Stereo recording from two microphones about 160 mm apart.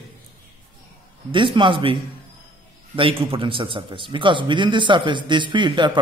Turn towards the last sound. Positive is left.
turn(degrees=-30)  # may be behind; listen again after turning